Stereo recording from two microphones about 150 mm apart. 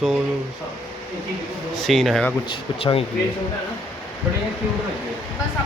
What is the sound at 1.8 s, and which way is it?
Speech, centre (ahead or behind).